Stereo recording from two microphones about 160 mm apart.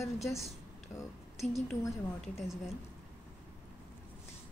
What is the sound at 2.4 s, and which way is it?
Speech, centre (ahead or behind).